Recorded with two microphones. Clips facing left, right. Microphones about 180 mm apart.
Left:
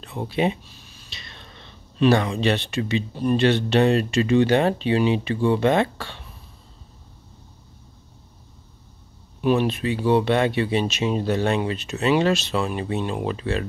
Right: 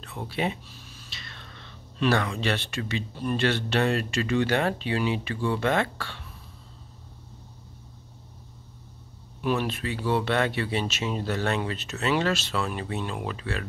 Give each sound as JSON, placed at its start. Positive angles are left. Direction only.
{"t": 0.0, "sound": "speech", "side_deg": 20}
{"t": 9.4, "sound": "speech", "side_deg": 20}